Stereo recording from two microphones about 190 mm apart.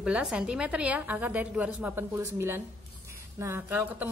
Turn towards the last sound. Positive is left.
turn(degrees=-10)  # may be behind; listen again after turning